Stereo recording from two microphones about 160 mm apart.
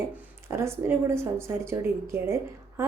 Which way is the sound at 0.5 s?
15° right (ahead or behind).